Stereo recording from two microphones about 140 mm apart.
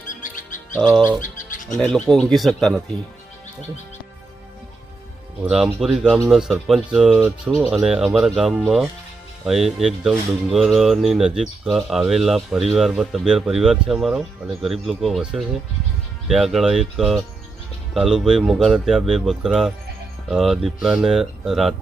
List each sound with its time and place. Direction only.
0.1 s music: 70° left (ahead or behind)
0.8 s speech: centre (ahead or behind)
1.2 s music: 70° left (ahead or behind)
1.8 s speech: 5° left (ahead or behind)
5.4 s speech: 5° right (ahead or behind)